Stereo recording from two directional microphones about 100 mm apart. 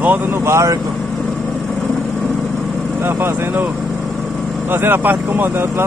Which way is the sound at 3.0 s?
25° right (ahead or behind).